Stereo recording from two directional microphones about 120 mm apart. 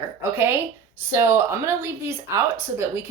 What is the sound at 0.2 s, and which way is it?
Speech, 20° right (ahead or behind).